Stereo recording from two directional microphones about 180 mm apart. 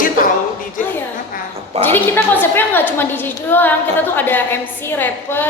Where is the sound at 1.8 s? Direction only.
10° left (ahead or behind).